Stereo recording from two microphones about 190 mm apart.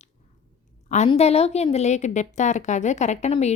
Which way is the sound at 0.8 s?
35° left (ahead or behind).